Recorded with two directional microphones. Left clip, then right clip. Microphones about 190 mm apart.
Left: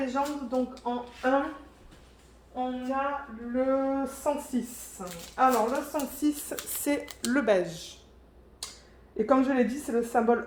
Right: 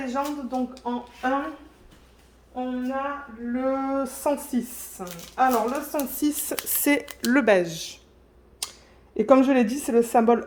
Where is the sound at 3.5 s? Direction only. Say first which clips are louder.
Right 1 dB; 75° right (ahead or behind).